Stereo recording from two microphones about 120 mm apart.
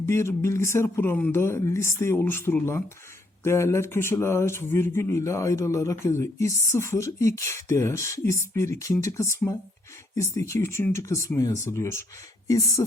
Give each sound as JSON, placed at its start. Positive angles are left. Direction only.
{"t": 0.0, "sound": "speech", "side_deg": 20}